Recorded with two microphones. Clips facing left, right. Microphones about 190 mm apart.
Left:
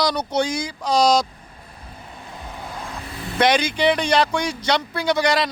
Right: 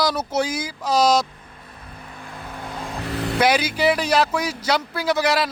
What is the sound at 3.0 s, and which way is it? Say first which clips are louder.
Vehicle: right 7 dB; 75° right (ahead or behind).